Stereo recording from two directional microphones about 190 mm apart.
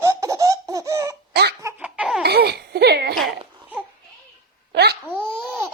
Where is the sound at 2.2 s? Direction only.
55° right (ahead or behind).